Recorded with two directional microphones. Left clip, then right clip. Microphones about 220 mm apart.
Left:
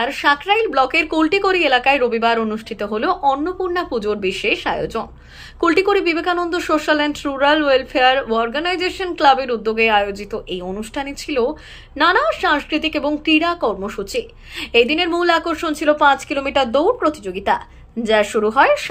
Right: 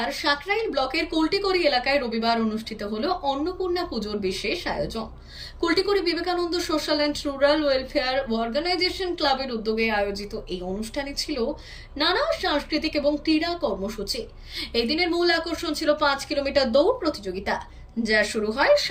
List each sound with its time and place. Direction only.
0.0 s a woman's voice: 15° left (ahead or behind)